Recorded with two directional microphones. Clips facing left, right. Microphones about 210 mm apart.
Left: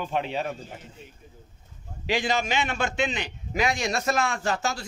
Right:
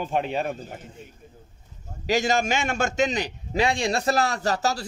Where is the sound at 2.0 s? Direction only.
45° right (ahead or behind).